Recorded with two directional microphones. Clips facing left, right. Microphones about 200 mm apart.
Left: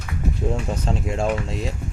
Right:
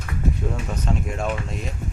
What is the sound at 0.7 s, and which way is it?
Speech, 30° left (ahead or behind).